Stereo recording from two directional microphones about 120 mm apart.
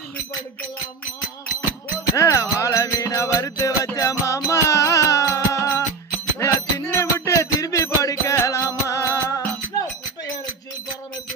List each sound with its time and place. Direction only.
2.1 s music: 25° left (ahead or behind)